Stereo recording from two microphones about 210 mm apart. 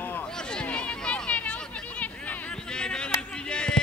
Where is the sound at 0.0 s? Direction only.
5° left (ahead or behind).